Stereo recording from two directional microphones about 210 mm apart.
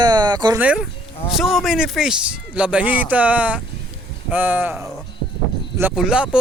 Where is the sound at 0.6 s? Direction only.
5° right (ahead or behind).